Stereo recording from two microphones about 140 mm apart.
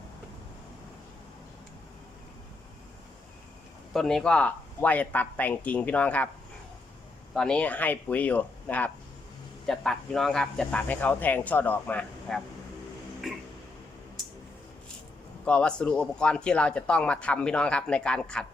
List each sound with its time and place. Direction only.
3.9 s speech: 5° left (ahead or behind)
7.3 s speech: 5° left (ahead or behind)
15.4 s speech: 10° left (ahead or behind)